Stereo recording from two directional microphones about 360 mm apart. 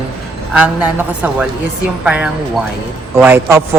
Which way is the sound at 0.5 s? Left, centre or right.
Centre.